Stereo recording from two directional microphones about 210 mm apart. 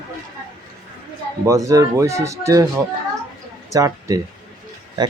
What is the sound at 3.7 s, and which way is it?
Speech, 15° right (ahead or behind).